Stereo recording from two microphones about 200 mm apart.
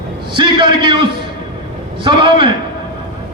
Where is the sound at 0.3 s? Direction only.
25° right (ahead or behind).